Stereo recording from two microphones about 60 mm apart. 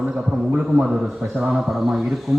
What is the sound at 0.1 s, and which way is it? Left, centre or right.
Speech, centre.